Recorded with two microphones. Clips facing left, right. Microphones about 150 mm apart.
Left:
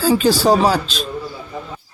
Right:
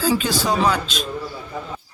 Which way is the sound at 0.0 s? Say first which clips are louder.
Left 6 dB; 35° left (ahead or behind).